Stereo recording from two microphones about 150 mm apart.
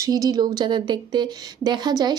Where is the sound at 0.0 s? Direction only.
25° right (ahead or behind).